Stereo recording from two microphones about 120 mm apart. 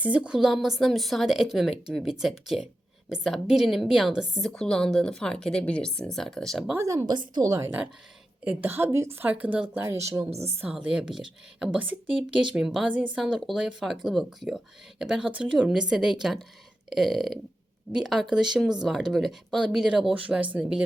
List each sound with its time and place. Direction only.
0.0 s a woman's voice: 10° right (ahead or behind)
6.7 s speech: 25° right (ahead or behind)
7.0 s speech: 40° right (ahead or behind)
8.4 s a woman's voice: 15° right (ahead or behind)
9.8 s speech: 25° right (ahead or behind)
10.6 s a woman's voice: 10° right (ahead or behind)